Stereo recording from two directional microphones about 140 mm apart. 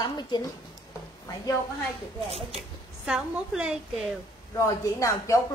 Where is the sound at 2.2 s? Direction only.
45° right (ahead or behind).